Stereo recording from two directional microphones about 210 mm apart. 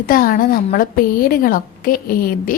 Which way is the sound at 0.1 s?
45° left (ahead or behind).